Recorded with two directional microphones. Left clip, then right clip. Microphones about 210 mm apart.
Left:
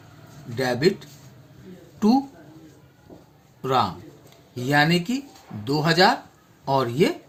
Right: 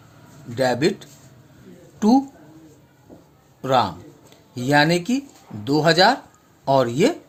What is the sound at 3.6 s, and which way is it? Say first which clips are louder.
Speech: right 3 dB; 45° right (ahead or behind).